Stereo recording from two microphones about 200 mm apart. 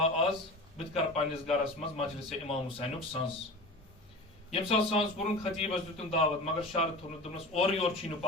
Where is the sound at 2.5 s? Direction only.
30° left (ahead or behind).